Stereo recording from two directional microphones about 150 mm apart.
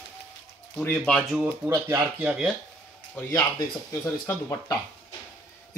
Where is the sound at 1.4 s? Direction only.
15° right (ahead or behind).